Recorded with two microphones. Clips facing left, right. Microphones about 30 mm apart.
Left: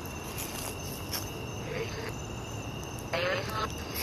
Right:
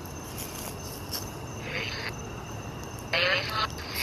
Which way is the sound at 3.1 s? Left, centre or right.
Right.